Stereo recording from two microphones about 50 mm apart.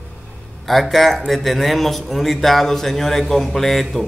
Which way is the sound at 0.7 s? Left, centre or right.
Centre.